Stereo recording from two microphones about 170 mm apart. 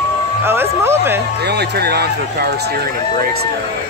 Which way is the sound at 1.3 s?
75° right (ahead or behind).